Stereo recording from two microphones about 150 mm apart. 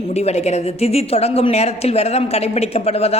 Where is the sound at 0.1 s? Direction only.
45° left (ahead or behind).